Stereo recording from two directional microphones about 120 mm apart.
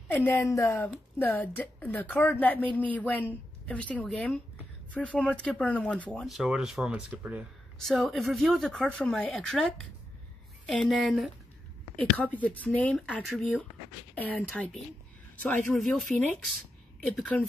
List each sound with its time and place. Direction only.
0.1 s speech: 20° left (ahead or behind)
6.2 s speech: 5° right (ahead or behind)
7.8 s speech: centre (ahead or behind)
10.9 s speech: centre (ahead or behind)
12.0 s speech: 10° left (ahead or behind)
16.0 s speech: centre (ahead or behind)